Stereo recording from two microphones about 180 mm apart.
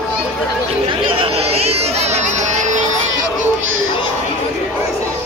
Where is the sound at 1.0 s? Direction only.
30° right (ahead or behind).